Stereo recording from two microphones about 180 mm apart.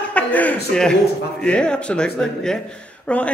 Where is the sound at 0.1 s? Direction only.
10° left (ahead or behind).